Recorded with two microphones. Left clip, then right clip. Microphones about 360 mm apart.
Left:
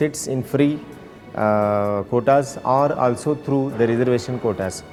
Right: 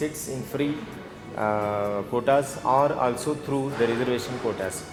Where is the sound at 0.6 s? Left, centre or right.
Left.